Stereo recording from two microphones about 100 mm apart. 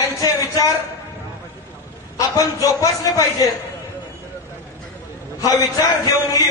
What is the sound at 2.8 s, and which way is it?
Speech, 35° left (ahead or behind).